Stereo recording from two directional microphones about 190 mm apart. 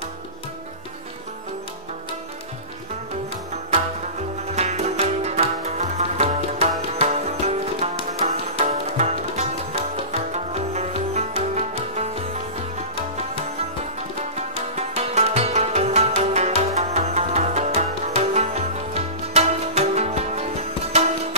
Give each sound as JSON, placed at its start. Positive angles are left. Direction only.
{"t": 4.6, "sound": "music", "side_deg": -35}
{"t": 14.8, "sound": "music", "side_deg": -35}